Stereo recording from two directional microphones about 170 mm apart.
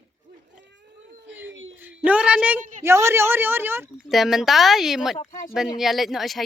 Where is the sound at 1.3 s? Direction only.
10° right (ahead or behind).